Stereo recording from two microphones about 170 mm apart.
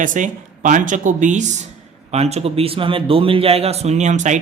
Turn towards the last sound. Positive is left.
turn(degrees=-45)  # may be behind; listen again after turning